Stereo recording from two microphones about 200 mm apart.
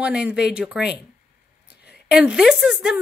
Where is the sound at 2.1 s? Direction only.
5° right (ahead or behind).